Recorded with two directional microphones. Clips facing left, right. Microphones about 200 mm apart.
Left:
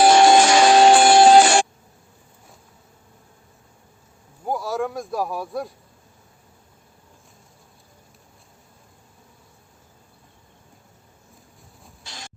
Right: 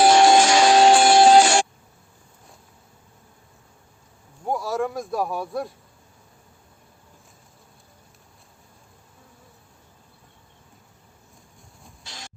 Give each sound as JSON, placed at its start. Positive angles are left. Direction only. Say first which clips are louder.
{"t": 0.0, "sound": "music", "louder": "left 1 dB", "side_deg": 55}
{"t": 4.4, "sound": "a man's voice", "louder": "even", "side_deg": 0}